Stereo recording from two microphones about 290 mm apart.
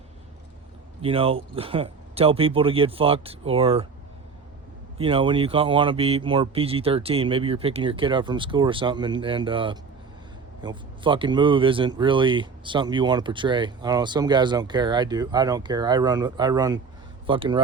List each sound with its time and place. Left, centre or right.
1.0 s speech: centre
4.9 s speech: centre